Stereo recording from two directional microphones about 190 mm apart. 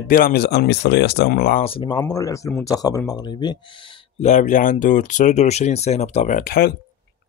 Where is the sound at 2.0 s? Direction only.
15° left (ahead or behind).